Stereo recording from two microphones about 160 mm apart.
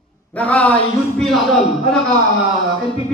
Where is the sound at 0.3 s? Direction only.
10° left (ahead or behind).